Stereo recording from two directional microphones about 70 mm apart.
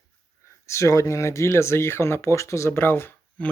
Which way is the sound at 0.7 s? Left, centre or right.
Left.